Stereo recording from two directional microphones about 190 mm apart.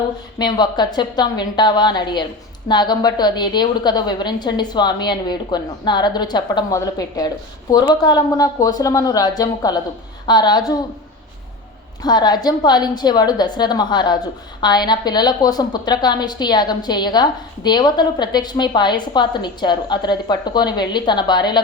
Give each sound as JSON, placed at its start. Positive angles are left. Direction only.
{"t": 0.3, "sound": "a woman's voice", "side_deg": 20}
{"t": 12.0, "sound": "a woman's voice", "side_deg": 20}